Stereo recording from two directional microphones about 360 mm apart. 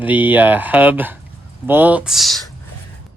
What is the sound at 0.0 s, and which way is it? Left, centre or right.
Speech, centre.